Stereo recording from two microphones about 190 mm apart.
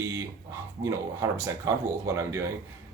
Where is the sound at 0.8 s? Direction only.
15° right (ahead or behind).